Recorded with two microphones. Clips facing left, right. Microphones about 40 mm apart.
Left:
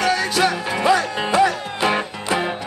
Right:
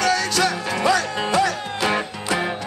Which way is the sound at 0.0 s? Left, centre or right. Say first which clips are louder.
Left 1 dB; left.